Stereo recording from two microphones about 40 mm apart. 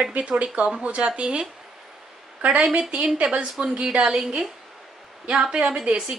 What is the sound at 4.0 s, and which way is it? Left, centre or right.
A woman's voice, centre.